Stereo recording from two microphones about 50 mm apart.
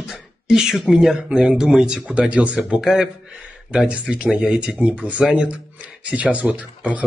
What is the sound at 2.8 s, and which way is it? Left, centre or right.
Speech, centre.